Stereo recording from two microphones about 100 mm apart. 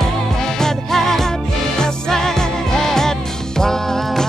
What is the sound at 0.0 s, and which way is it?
Music, 5° left (ahead or behind).